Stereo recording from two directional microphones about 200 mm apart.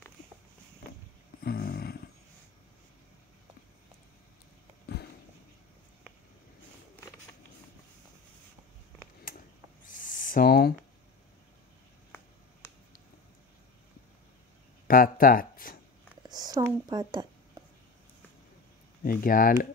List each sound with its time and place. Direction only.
1.4 s a sound: 50° left (ahead or behind)
4.9 s a sound: 55° left (ahead or behind)
9.8 s owl: 45° left (ahead or behind)
12.1 s finger snapping: 10° left (ahead or behind)
14.9 s speech: 45° left (ahead or behind)
16.2 s speech: 20° right (ahead or behind)
19.0 s speech: 45° left (ahead or behind)